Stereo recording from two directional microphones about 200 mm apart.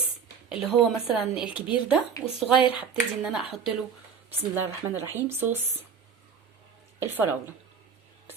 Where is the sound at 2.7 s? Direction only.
5° right (ahead or behind).